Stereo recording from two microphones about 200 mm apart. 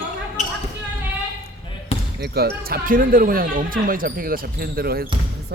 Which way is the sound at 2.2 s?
50° right (ahead or behind).